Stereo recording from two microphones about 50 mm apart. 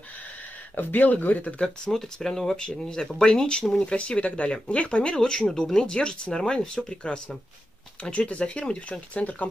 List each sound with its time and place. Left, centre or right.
0.7 s speech: left
1.9 s speech: centre; by 9.5 s left